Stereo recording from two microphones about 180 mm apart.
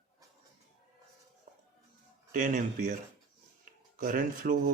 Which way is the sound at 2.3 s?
45° right (ahead or behind).